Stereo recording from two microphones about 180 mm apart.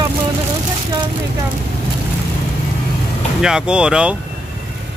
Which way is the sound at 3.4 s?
5° right (ahead or behind).